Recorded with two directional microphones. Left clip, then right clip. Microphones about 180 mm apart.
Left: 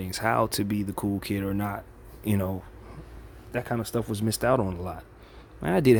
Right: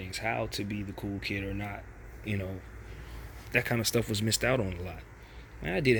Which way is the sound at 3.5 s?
10° left (ahead or behind).